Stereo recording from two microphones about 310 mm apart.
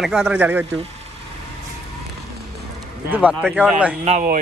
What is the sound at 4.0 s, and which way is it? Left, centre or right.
Speech, right.